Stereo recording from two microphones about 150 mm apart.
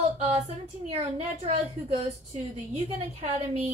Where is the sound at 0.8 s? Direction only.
50° right (ahead or behind).